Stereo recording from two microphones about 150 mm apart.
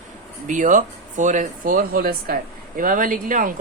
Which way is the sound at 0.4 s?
60° right (ahead or behind).